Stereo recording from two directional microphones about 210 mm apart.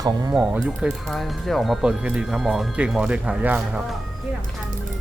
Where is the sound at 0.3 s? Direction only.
5° right (ahead or behind).